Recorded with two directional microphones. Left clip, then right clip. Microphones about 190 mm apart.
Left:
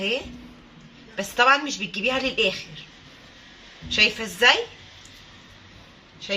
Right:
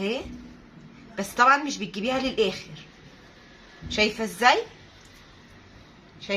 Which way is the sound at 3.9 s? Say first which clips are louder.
Left 4 dB; 15° right (ahead or behind).